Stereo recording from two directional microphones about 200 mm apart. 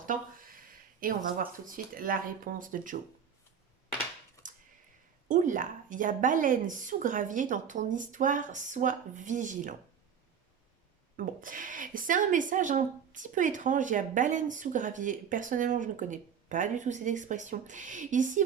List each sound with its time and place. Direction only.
0.0 s speech: 45° right (ahead or behind)
4.4 s typing: 40° right (ahead or behind)
5.3 s a woman's voice: 40° right (ahead or behind)
11.2 s a woman's voice: 40° right (ahead or behind)